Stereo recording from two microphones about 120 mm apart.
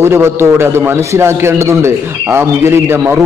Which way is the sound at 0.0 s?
20° right (ahead or behind).